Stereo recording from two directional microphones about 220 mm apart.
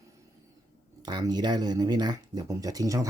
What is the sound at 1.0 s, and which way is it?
Speech, 20° right (ahead or behind).